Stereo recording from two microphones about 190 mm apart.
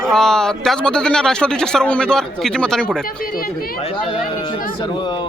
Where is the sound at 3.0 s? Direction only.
50° left (ahead or behind).